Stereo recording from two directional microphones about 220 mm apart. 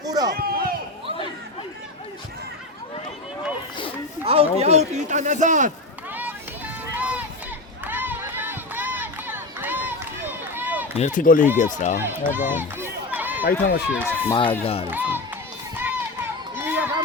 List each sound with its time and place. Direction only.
0.0 s a sound: 15° right (ahead or behind)
0.3 s a sound: 40° right (ahead or behind)
4.3 s speech: 25° right (ahead or behind)
6.9 s run: 5° right (ahead or behind)
10.9 s speech: 35° left (ahead or behind)
12.3 s run: 10° right (ahead or behind)
13.4 s speech: 45° left (ahead or behind)
13.9 s speech: 10° right (ahead or behind)
14.3 s speech: 25° left (ahead or behind)
14.8 s speech: 10° right (ahead or behind)
15.7 s run: 10° right (ahead or behind)
16.6 s a sound: 10° right (ahead or behind)